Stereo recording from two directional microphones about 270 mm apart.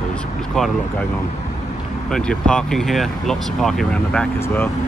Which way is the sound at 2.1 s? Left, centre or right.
Centre.